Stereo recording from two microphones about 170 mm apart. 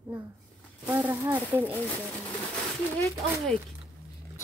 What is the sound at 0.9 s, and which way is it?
Speech, 10° right (ahead or behind).